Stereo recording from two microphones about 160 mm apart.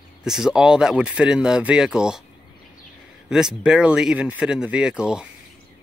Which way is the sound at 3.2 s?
5° right (ahead or behind).